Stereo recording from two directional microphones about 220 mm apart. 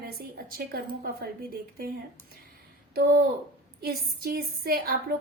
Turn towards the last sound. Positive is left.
turn(degrees=-45)  # may be behind; listen again after turning